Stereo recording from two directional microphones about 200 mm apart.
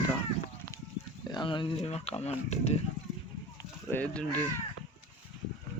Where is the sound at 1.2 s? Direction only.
25° left (ahead or behind).